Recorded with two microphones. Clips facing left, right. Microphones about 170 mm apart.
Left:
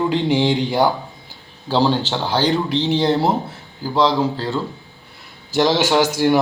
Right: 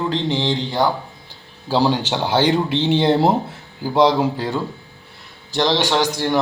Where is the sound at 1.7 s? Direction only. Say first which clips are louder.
Even; 10° right (ahead or behind).